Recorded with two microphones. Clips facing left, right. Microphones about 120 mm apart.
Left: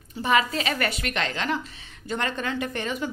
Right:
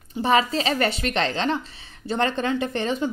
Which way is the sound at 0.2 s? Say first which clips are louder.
Right 3 dB; 30° right (ahead or behind).